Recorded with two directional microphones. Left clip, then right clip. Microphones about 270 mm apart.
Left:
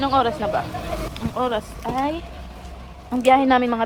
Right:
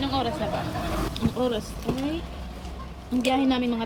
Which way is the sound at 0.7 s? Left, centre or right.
Centre.